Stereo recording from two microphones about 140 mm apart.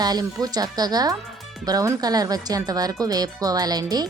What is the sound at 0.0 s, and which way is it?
Speech, 30° right (ahead or behind).